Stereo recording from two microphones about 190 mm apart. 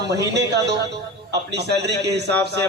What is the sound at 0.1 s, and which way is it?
A man's voice, 65° right (ahead or behind).